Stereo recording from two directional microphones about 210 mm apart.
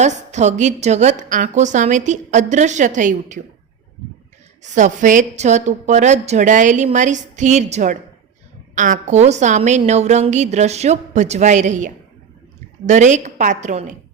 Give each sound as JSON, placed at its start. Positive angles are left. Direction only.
{"t": 0.0, "sound": "a woman's voice", "side_deg": -35}
{"t": 4.6, "sound": "a woman's voice", "side_deg": -35}